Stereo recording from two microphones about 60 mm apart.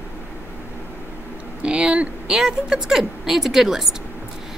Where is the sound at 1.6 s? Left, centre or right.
Centre.